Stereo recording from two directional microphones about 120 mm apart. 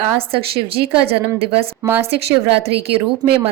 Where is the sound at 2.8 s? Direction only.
50° right (ahead or behind).